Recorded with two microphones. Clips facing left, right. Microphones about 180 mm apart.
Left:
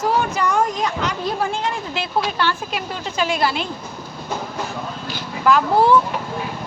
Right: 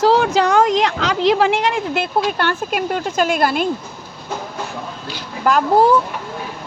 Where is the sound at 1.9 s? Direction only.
55° right (ahead or behind).